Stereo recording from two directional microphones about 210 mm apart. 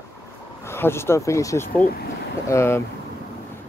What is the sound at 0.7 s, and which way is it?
Speech, 10° left (ahead or behind).